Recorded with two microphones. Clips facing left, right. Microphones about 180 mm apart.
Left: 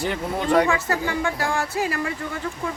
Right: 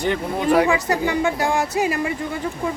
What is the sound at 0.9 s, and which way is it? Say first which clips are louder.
Speech: right 4 dB; 15° right (ahead or behind).